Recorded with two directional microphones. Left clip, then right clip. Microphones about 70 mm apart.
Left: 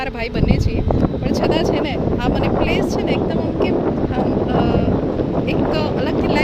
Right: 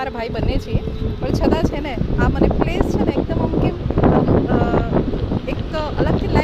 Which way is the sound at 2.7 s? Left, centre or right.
Left.